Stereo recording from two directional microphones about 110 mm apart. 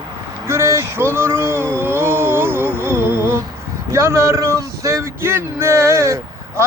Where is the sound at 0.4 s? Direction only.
25° right (ahead or behind).